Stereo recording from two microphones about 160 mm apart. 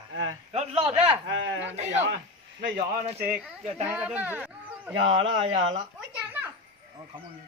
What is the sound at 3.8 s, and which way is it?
Speech, 10° right (ahead or behind).